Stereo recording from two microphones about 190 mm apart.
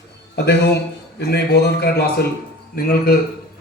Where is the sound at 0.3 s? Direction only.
60° left (ahead or behind).